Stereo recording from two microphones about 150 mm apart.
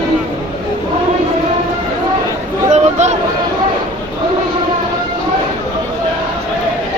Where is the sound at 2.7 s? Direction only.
50° right (ahead or behind).